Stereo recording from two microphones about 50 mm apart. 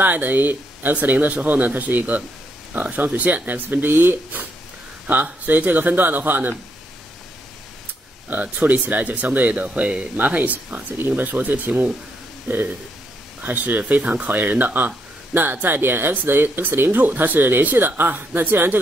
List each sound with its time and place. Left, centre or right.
0.0 s speech: right
8.3 s speech: right
11.0 s speech: right
13.4 s speech: right